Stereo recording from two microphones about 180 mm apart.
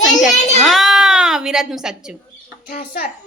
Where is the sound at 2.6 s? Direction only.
55° left (ahead or behind).